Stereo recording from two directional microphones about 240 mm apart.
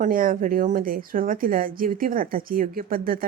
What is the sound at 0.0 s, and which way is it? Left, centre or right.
Speech, right.